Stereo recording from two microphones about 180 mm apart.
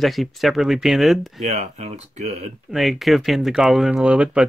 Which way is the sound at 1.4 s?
35° right (ahead or behind).